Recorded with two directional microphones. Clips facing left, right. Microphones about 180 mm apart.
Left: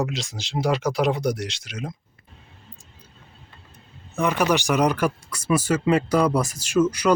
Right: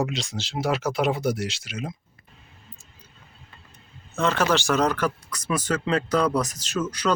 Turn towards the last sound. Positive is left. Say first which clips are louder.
# left 6 dB
turn(degrees=10)  # may be behind; listen again after turning